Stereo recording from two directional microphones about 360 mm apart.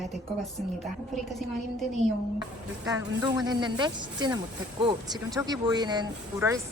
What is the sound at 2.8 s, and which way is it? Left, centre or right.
Speech, centre.